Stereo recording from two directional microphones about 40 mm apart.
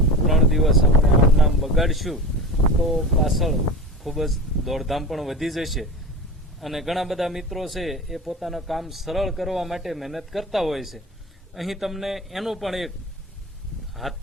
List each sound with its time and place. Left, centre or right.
0.3 s speech: centre
13.9 s speech: centre